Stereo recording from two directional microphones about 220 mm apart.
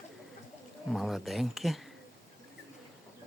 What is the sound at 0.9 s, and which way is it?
Speech, centre (ahead or behind).